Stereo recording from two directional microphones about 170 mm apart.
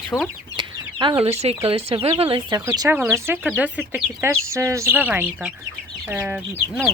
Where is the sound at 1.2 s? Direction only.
40° right (ahead or behind); by 6.4 s 15° right (ahead or behind).